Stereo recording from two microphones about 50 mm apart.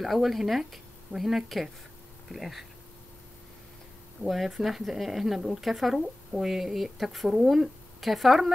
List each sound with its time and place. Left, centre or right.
0.0 s speech: centre
4.2 s speech: centre